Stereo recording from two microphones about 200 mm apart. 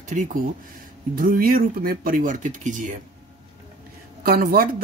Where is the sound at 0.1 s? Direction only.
40° right (ahead or behind).